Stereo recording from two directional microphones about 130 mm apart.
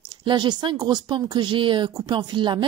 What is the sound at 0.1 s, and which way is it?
A woman's voice, 35° right (ahead or behind).